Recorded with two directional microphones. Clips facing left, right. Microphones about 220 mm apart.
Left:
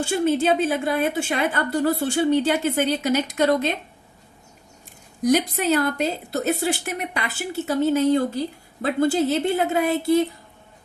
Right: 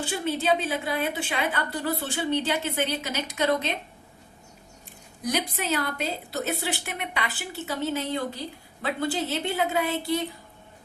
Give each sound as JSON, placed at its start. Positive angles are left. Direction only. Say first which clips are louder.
{"t": 0.0, "sound": "a woman's voice", "louder": "left 7 dB", "side_deg": 45}
{"t": 5.2, "sound": "a woman's voice", "louder": "left 9 dB", "side_deg": 45}